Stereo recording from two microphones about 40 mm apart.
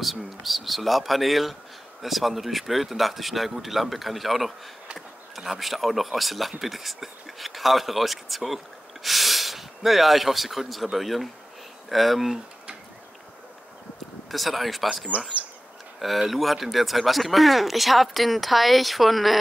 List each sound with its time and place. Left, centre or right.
0.0 s speech: centre
14.3 s speech: centre
15.1 s speech: right
16.2 s speech: centre